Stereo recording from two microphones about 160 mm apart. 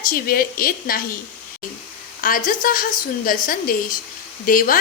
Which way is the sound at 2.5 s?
60° left (ahead or behind).